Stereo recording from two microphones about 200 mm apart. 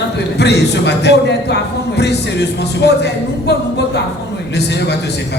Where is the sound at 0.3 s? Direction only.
55° left (ahead or behind).